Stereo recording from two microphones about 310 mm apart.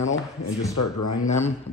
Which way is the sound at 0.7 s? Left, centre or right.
Left.